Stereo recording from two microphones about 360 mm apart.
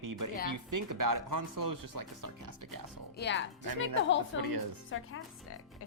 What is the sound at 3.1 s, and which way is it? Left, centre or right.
A woman's voice, left.